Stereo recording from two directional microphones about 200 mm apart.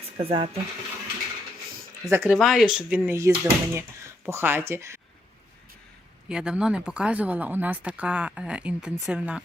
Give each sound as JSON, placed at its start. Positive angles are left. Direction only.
{"t": 0.2, "sound": "speech", "side_deg": -30}
{"t": 2.0, "sound": "speech", "side_deg": -10}
{"t": 6.2, "sound": "speech", "side_deg": -5}